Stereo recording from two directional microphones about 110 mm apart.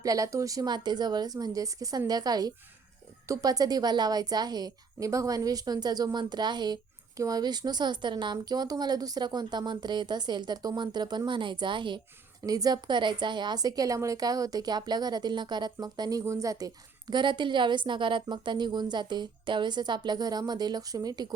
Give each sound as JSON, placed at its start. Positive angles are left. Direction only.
{"t": 0.0, "sound": "a woman's voice", "side_deg": -30}
{"t": 12.5, "sound": "a woman's voice", "side_deg": -35}